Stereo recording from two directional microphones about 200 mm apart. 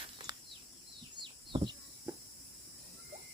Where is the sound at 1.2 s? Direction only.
25° right (ahead or behind).